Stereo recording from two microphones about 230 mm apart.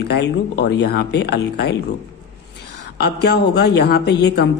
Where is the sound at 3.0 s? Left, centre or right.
Left.